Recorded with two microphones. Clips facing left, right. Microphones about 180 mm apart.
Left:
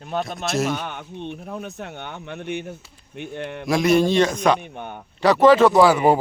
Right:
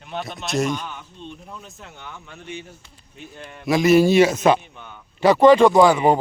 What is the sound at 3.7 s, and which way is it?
Speech, centre (ahead or behind).